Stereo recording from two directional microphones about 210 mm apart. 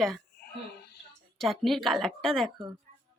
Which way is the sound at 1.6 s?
Centre (ahead or behind).